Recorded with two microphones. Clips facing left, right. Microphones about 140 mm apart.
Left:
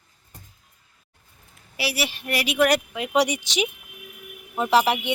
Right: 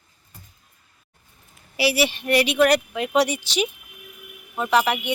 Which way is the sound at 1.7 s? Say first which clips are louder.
Right 7 dB; centre (ahead or behind).